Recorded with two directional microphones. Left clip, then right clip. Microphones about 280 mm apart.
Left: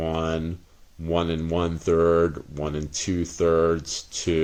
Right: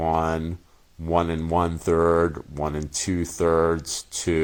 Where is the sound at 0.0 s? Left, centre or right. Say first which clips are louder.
Right 4 dB; right.